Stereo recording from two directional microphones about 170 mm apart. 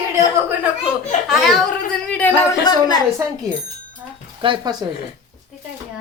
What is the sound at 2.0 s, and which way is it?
Music, 10° left (ahead or behind).